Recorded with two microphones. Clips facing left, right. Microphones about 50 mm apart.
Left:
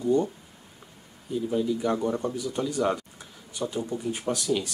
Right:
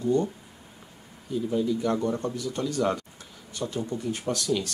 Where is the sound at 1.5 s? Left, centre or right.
Centre.